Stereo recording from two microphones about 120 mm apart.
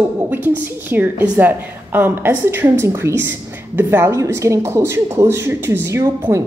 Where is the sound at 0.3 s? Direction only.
15° right (ahead or behind).